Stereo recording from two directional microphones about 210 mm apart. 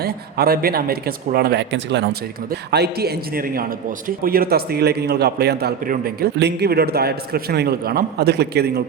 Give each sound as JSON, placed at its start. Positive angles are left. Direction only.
{"t": 0.0, "sound": "a man's voice", "side_deg": -45}